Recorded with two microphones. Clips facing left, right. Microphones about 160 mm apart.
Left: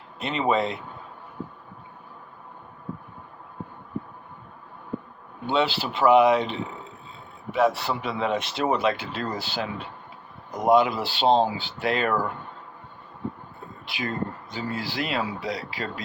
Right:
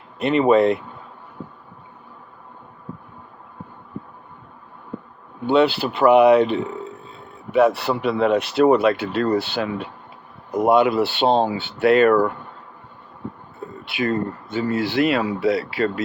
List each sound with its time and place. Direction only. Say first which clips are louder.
0.2 s speech: right 9 dB; 60° right (ahead or behind)
5.5 s speech: right 7 dB; 60° right (ahead or behind)
13.8 s speech: right 7 dB; 60° right (ahead or behind)